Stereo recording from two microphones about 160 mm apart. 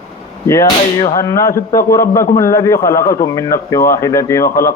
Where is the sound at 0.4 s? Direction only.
20° left (ahead or behind).